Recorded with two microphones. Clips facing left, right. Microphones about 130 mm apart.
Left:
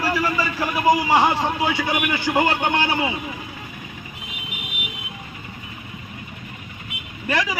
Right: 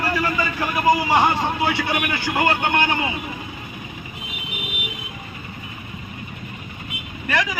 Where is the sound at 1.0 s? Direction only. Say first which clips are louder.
Even; 10° left (ahead or behind).